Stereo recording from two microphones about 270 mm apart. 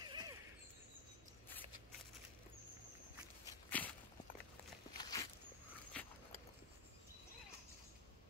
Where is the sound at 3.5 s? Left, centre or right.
Centre.